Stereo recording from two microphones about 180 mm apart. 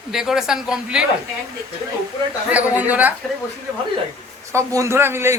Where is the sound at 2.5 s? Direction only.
10° right (ahead or behind).